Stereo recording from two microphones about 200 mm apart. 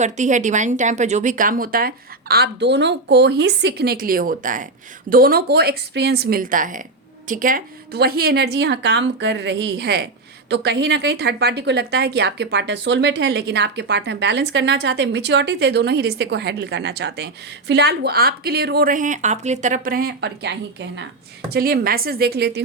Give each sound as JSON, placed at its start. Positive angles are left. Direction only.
{"t": 0.0, "sound": "a woman's voice", "side_deg": -35}
{"t": 21.5, "sound": "a woman's voice", "side_deg": -50}